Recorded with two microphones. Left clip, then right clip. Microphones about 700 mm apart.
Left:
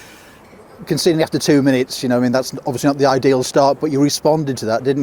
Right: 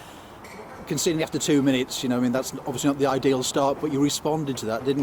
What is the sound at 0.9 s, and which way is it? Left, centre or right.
Speech, left.